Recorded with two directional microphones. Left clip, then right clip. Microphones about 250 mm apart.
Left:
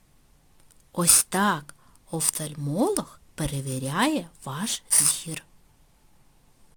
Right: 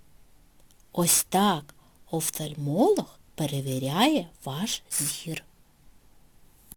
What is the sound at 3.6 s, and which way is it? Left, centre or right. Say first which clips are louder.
Speech: right 1 dB; centre.